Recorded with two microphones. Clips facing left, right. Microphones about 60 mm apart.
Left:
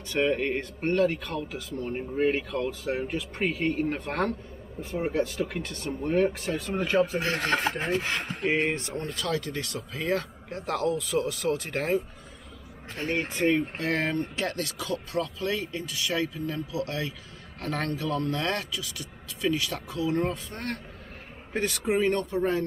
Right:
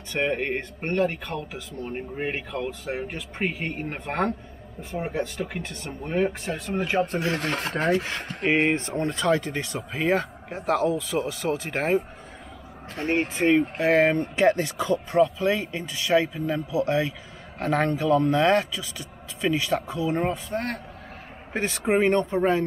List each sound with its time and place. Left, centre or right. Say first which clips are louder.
0.2 s speech: even; centre
0.7 s speech: left 1 dB; right
1.2 s speech: right 1 dB; centre
7.7 s speech: right 4 dB; right
8.5 s speech: right 4 dB; right
8.7 s speech: right 6 dB; right
12.9 s speech: right 4 dB; right
13.4 s speech: right 4 dB; centre
20.2 s speech: right 5 dB; centre
21.5 s speech: right 3 dB; right